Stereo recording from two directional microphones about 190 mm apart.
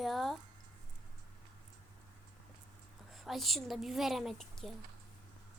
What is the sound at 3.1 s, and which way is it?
A woman's voice, centre (ahead or behind).